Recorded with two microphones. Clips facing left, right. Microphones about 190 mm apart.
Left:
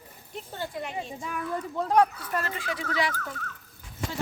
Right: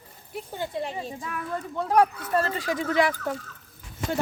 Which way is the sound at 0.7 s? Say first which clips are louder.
Right 3 dB; 30° right (ahead or behind).